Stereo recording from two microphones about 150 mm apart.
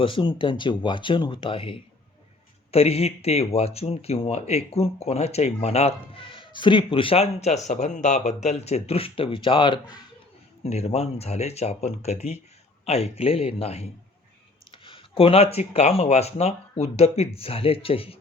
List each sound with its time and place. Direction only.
0.0 s speech: 35° left (ahead or behind)